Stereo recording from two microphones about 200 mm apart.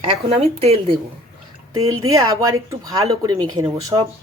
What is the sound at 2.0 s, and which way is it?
Speech, 15° right (ahead or behind).